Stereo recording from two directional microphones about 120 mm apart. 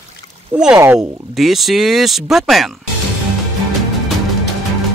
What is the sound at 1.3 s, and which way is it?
Speech, centre (ahead or behind).